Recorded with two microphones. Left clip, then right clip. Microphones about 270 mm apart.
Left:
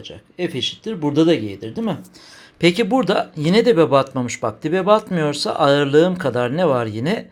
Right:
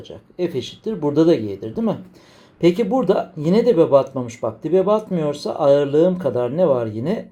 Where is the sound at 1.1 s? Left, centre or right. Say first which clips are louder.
Even; left.